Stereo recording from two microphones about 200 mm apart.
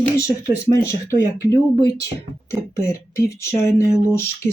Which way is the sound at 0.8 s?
15° left (ahead or behind).